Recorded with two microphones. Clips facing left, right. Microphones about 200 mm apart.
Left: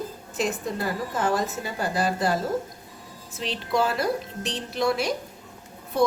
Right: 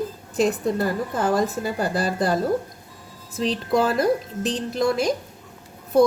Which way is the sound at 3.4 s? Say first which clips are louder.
Right 4 dB; 40° right (ahead or behind).